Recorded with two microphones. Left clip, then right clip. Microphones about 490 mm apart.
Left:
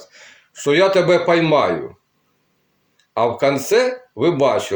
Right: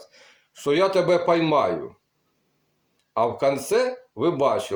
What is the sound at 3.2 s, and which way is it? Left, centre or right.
A man's voice, right.